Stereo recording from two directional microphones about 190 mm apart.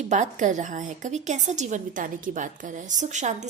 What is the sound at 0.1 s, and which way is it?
A woman's voice, 40° right (ahead or behind).